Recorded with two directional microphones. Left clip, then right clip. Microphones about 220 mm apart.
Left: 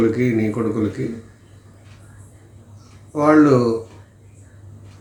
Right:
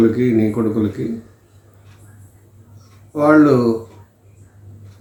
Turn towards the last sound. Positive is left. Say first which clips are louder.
# right 2 dB
turn(degrees=10)  # may be behind; listen again after turning